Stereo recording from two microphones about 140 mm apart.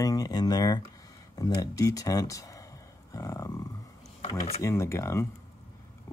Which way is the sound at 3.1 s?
25° left (ahead or behind).